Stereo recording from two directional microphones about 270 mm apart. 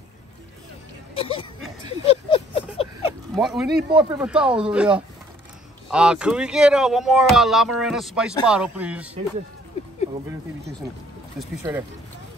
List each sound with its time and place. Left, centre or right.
1.1 s speech: centre
2.0 s a sound: centre
3.3 s speech: centre
3.9 s speech: centre
11.3 s speech: centre